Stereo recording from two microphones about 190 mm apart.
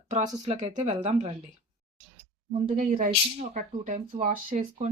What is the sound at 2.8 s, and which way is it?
Speech, 40° right (ahead or behind).